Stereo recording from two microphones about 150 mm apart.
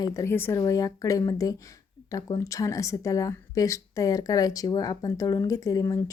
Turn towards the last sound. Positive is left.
turn(degrees=20)  # may be behind; listen again after turning